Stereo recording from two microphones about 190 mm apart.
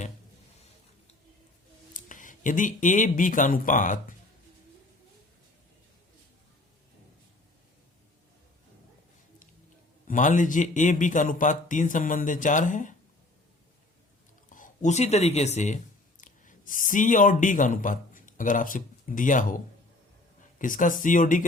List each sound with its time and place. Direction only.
1.9 s speech: 45° left (ahead or behind)
10.1 s speech: 40° left (ahead or behind)
14.5 s speech: 40° left (ahead or behind)